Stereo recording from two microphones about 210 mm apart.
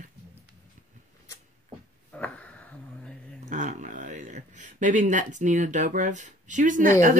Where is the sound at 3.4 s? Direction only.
35° right (ahead or behind).